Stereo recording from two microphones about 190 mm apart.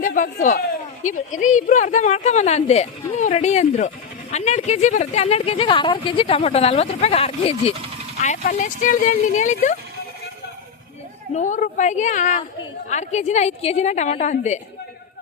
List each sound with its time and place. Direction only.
0.0 s a man's voice: 45° left (ahead or behind)
11.3 s speech: 40° left (ahead or behind)